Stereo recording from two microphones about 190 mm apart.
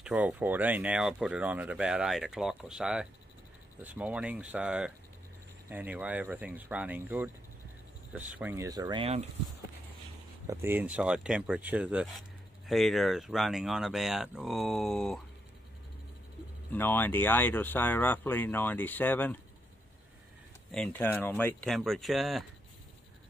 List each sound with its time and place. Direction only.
0.0 s speech: 5° right (ahead or behind); by 9.2 s 25° right (ahead or behind)
10.4 s speech: 15° right (ahead or behind); by 15.1 s centre (ahead or behind)
16.7 s speech: 10° left (ahead or behind)
20.7 s speech: 5° left (ahead or behind)